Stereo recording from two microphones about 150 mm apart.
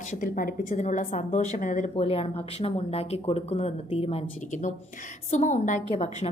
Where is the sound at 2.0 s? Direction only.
40° left (ahead or behind).